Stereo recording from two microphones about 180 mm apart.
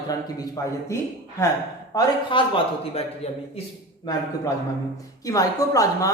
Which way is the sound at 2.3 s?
30° left (ahead or behind).